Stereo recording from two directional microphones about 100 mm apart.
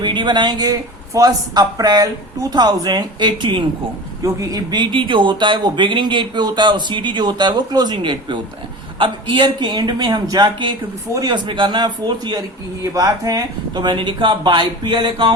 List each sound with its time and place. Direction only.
0.0 s speech: 50° right (ahead or behind)
4.2 s speech: 35° right (ahead or behind)
12.9 s speech: 35° right (ahead or behind); by 15.3 s 55° right (ahead or behind)